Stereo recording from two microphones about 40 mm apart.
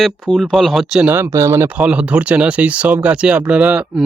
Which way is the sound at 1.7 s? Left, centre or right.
Right.